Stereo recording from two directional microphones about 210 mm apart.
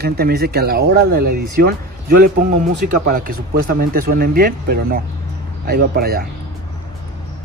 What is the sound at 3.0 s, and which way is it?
Speech, 45° right (ahead or behind).